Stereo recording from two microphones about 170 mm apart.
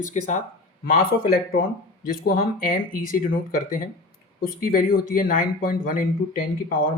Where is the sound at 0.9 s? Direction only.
60° left (ahead or behind).